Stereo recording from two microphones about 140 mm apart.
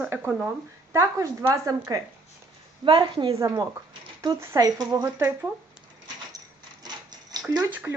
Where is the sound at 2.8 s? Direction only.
35° right (ahead or behind).